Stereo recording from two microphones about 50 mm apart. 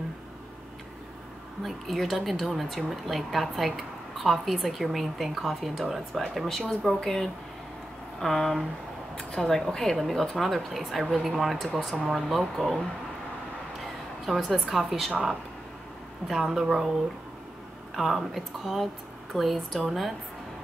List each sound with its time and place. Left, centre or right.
1.6 s a woman's voice: centre
9.3 s a woman's voice: centre
9.8 s a woman's voice: centre
14.2 s a woman's voice: centre
16.3 s speech: centre
17.9 s a woman's voice: centre